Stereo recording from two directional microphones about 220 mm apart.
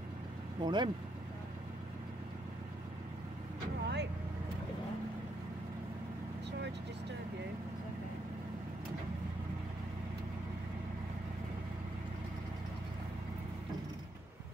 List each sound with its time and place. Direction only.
0.6 s speech: 20° right (ahead or behind)
3.8 s vehicle: 50° right (ahead or behind)